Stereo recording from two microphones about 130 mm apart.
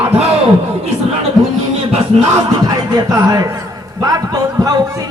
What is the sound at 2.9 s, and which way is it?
Speech, 25° right (ahead or behind).